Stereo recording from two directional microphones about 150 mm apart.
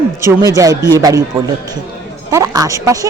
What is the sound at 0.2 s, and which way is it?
Speech, 20° right (ahead or behind).